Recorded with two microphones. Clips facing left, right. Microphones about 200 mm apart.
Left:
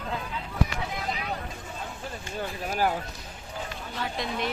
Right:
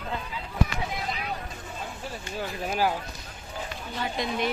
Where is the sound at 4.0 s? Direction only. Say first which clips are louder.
Right 2 dB; centre (ahead or behind).